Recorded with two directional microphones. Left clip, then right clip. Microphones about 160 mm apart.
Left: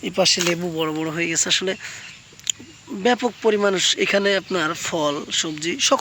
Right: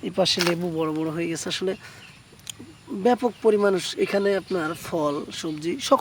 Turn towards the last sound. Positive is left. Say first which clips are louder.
# left 2 dB
turn(degrees=-5)  # may be behind; listen again after turning